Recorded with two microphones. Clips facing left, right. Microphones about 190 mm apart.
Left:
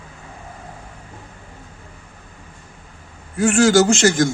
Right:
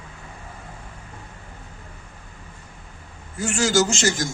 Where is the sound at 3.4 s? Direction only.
60° left (ahead or behind).